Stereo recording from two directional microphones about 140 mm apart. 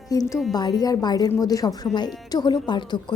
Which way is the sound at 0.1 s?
25° left (ahead or behind).